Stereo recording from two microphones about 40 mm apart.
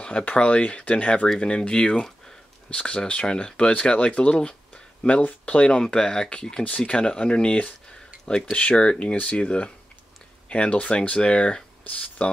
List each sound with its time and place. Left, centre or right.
0.2 s speech: left